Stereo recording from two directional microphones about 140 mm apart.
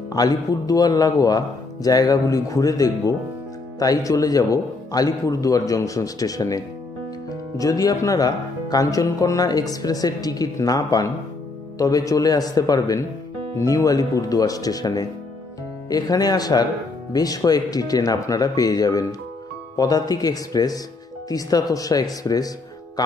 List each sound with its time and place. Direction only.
0.1 s speech: 25° left (ahead or behind)